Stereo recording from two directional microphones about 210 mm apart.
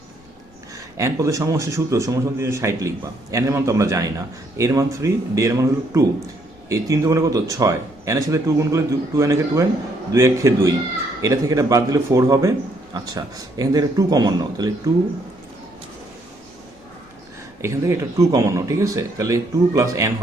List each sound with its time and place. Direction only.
0.9 s a man's voice: 15° right (ahead or behind)
17.6 s a man's voice: 15° right (ahead or behind)